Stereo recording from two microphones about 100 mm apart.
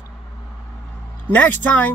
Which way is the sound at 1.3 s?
15° left (ahead or behind).